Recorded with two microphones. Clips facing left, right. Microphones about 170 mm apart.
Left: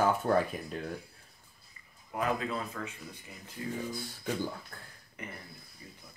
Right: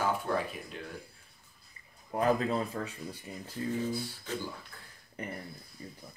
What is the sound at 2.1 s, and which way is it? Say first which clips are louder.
Speech: right 4 dB; 35° right (ahead or behind).